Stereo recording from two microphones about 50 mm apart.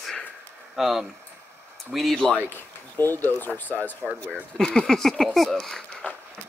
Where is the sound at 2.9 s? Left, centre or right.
Left.